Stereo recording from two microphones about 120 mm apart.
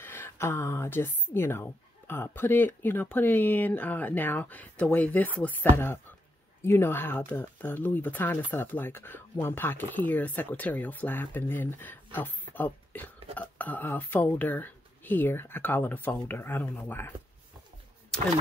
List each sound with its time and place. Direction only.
0.0 s speech: 20° left (ahead or behind)
18.1 s speech: 5° left (ahead or behind)